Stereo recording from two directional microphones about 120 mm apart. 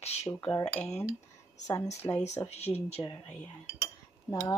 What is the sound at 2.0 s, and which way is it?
Speech, 40° left (ahead or behind).